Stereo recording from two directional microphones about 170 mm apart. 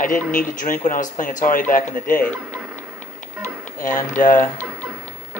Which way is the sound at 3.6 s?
50° left (ahead or behind).